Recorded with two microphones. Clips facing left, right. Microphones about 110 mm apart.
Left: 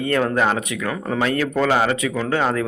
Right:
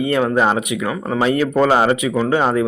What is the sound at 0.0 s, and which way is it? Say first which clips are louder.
A man's voice: right 3 dB; 10° right (ahead or behind).